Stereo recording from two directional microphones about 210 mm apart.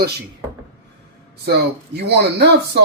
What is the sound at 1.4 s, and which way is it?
Speech, 50° right (ahead or behind).